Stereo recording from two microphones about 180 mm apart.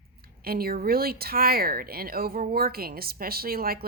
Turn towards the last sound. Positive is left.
turn(degrees=-55)  # may be behind; listen again after turning